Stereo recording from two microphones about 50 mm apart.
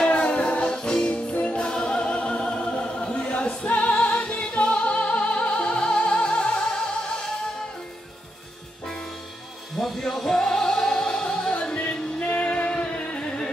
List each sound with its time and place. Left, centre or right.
0.0 s music: left
1.6 s choir: centre
9.8 s music: centre